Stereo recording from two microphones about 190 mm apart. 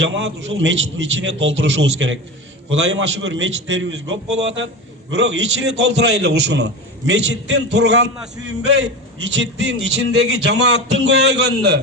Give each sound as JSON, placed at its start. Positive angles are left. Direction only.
{"t": 0.0, "sound": "a man's voice", "side_deg": -80}
{"t": 9.2, "sound": "a man's voice", "side_deg": -75}